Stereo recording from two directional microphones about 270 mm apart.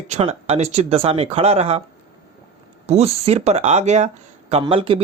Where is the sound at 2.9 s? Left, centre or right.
Right.